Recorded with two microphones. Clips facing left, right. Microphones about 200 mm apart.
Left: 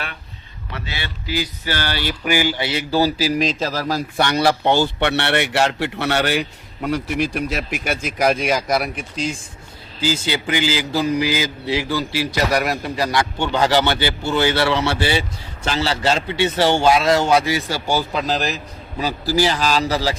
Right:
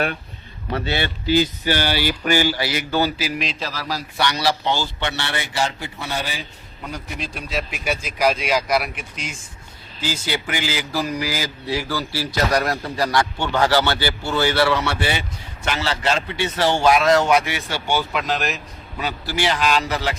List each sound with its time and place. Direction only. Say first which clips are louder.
1.3 s speech: right 6 dB; 20° right (ahead or behind)
2.0 s speech: left 2 dB; 10° left (ahead or behind); by 8.9 s 45° left (ahead or behind)
10.0 s a man's voice: left 4 dB; 25° left (ahead or behind)